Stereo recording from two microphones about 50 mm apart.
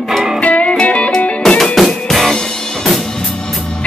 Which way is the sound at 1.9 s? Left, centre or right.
Centre.